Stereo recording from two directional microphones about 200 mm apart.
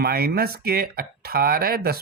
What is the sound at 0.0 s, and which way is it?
Speech, 50° right (ahead or behind).